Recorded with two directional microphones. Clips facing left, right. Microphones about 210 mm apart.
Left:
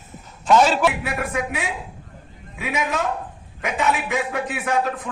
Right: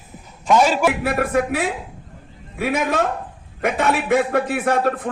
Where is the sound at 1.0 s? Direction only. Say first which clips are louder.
Right 6 dB; 60° right (ahead or behind).